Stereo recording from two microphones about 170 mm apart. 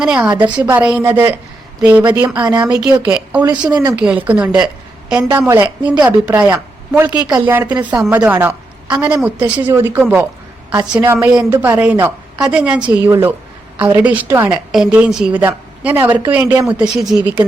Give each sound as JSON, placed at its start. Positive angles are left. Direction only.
{"t": 0.0, "sound": "a woman's voice", "side_deg": -5}
{"t": 2.4, "sound": "speech", "side_deg": -20}
{"t": 3.0, "sound": "a woman's voice", "side_deg": -10}
{"t": 3.7, "sound": "speech", "side_deg": -20}
{"t": 3.9, "sound": "a woman's voice", "side_deg": -10}
{"t": 16.8, "sound": "speech", "side_deg": -5}